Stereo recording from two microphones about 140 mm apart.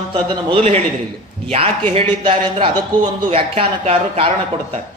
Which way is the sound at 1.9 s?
40° right (ahead or behind).